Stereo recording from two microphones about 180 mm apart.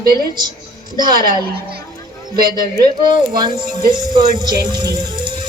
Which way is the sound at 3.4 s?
25° right (ahead or behind).